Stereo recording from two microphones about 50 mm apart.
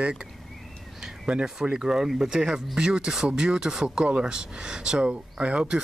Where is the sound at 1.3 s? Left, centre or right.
Centre.